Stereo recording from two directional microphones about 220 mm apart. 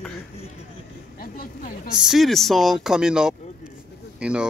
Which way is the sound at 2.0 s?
Centre (ahead or behind).